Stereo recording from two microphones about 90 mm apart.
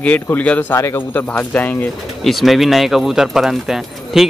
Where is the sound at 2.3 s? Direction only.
Centre (ahead or behind).